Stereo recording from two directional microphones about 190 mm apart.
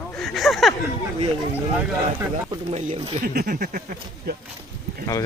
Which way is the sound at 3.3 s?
50° right (ahead or behind).